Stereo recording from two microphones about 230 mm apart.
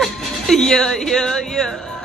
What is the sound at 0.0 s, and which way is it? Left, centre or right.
Speech, centre.